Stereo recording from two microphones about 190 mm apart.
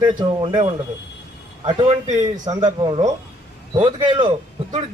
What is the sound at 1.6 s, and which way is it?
A man's voice, 25° right (ahead or behind).